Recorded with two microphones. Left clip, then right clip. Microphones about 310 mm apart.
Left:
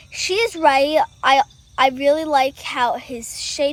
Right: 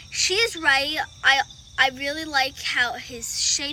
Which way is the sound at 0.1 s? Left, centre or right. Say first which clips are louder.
Left 2 dB; centre.